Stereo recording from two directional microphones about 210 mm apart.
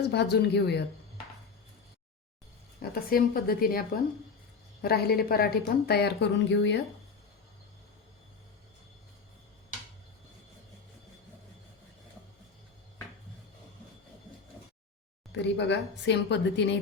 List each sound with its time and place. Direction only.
0.1 s a woman's voice: 55° left (ahead or behind)
2.9 s a woman's voice: 45° left (ahead or behind)
15.3 s a woman's voice: 55° left (ahead or behind)